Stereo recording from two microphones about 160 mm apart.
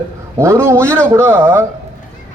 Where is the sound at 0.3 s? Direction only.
15° right (ahead or behind).